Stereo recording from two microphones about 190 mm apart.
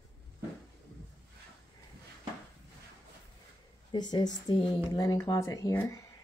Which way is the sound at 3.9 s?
25° left (ahead or behind).